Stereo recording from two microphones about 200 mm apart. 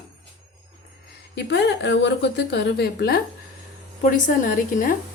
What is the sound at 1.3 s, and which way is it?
A woman's voice, 60° left (ahead or behind).